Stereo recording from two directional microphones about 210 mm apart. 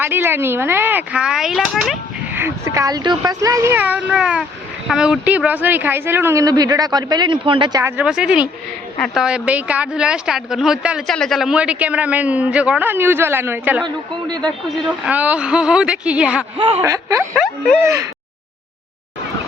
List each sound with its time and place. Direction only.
0.0 s a woman's voice: 10° right (ahead or behind)
14.8 s a woman's voice: 5° right (ahead or behind)
16.6 s a man's voice: 30° right (ahead or behind)
16.8 s speech: 15° right (ahead or behind)
17.3 s a woman's voice: centre (ahead or behind)
17.7 s speech: 15° right (ahead or behind)